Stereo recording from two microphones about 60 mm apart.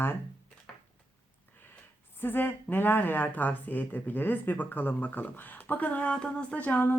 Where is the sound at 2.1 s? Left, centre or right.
Left; by 6.7 s centre.